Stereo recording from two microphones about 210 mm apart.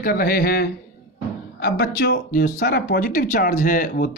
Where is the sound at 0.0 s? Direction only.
45° left (ahead or behind).